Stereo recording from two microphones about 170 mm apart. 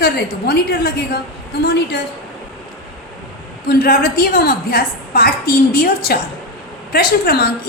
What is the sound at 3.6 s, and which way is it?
A woman's voice, 60° left (ahead or behind).